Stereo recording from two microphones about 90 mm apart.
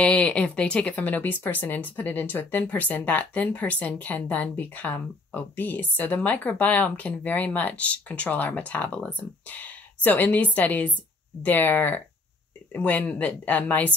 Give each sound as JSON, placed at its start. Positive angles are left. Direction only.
{"t": 0.0, "sound": "speech", "side_deg": 15}